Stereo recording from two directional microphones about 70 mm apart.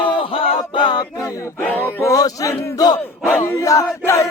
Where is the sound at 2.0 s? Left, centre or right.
Left.